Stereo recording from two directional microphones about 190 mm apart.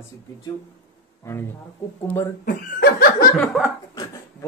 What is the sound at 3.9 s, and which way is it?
Dog, 20° left (ahead or behind).